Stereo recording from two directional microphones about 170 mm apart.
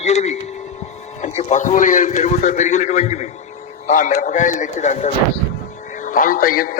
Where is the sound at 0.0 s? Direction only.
40° left (ahead or behind).